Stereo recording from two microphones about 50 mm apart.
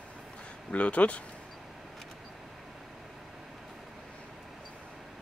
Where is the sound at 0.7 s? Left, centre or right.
Left.